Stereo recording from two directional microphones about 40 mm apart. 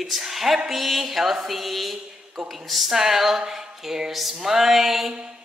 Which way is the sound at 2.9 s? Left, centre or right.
Centre.